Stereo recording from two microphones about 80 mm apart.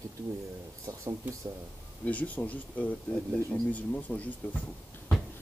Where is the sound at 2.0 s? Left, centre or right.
Centre.